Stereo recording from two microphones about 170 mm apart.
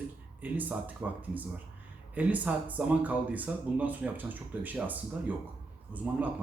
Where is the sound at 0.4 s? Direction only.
10° right (ahead or behind).